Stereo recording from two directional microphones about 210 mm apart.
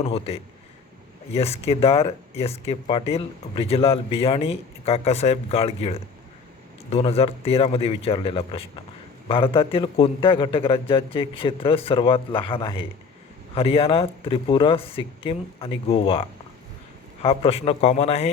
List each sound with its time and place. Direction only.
0.1 s speech: 30° left (ahead or behind)
17.2 s speech: 25° left (ahead or behind)